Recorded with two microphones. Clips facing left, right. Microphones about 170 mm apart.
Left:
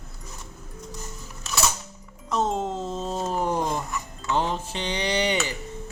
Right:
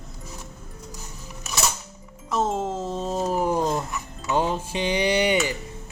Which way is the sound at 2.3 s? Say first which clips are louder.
Right 1 dB; centre (ahead or behind).